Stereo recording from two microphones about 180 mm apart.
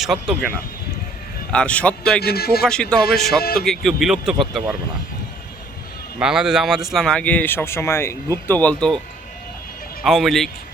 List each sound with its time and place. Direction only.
0.0 s speech: centre (ahead or behind)
1.5 s speech: 5° left (ahead or behind)
2.2 s a man's voice: 60° left (ahead or behind)
3.2 s speech: centre (ahead or behind)
6.1 s speech: 5° right (ahead or behind)
10.0 s speech: centre (ahead or behind)